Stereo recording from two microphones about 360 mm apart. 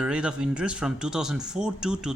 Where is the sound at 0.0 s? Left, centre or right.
Centre.